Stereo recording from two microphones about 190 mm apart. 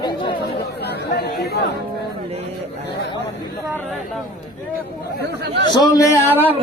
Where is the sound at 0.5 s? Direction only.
55° left (ahead or behind).